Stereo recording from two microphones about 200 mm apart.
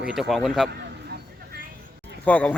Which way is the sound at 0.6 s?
55° right (ahead or behind).